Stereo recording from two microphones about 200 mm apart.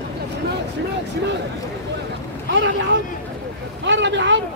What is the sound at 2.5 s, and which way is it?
Vehicle, 65° right (ahead or behind).